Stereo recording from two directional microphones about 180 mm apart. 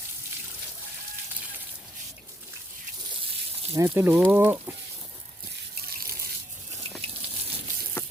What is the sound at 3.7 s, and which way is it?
Speech, 15° right (ahead or behind).